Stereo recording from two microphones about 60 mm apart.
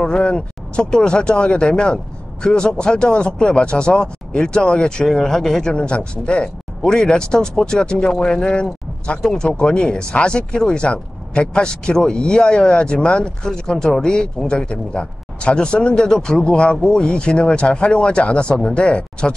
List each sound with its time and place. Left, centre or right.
0.0 s speech: centre